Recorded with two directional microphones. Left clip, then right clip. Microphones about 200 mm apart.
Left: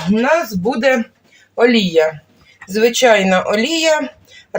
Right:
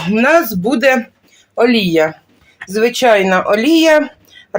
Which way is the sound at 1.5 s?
40° right (ahead or behind).